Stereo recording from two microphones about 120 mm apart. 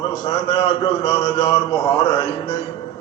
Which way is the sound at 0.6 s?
55° left (ahead or behind).